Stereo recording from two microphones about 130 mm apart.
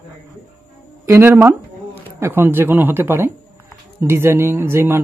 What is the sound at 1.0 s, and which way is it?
Speech, 15° right (ahead or behind).